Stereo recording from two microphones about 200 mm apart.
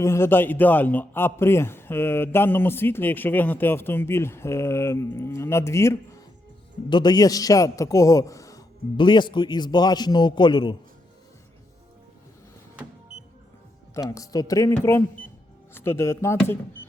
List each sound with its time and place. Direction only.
0.0 s a man's voice: 15° left (ahead or behind)
13.9 s a man's voice: 15° left (ahead or behind)